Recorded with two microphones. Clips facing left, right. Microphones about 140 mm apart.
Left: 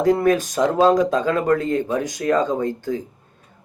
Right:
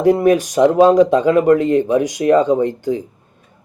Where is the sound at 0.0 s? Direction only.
15° right (ahead or behind).